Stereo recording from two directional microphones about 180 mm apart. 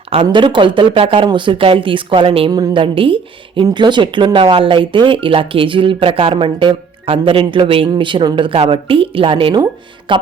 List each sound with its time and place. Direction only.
0.1 s speech: 30° right (ahead or behind)